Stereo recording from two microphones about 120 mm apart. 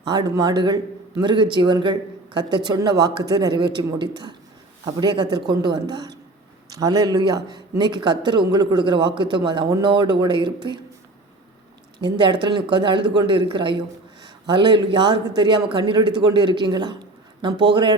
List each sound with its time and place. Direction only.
0.1 s speech: 35° right (ahead or behind)
11.9 s speech: 40° right (ahead or behind)